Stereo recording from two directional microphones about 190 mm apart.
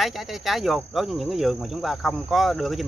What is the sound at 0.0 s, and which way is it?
Cricket, centre (ahead or behind).